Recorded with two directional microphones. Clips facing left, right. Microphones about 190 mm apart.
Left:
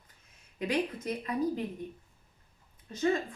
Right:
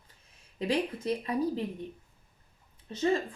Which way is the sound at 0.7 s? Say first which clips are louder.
Right 2 dB; 30° right (ahead or behind).